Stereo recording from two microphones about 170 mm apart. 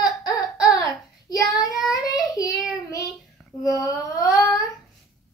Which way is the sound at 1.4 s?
20° left (ahead or behind).